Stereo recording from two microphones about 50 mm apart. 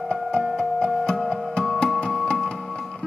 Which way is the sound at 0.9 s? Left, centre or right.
Centre.